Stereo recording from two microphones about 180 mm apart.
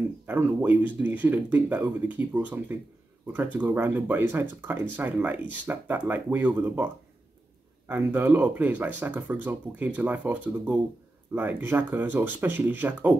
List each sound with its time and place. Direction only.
0.3 s speech: 10° right (ahead or behind)
7.9 s speech: 10° right (ahead or behind)